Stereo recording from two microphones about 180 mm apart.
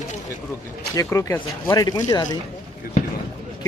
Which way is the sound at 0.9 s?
15° left (ahead or behind).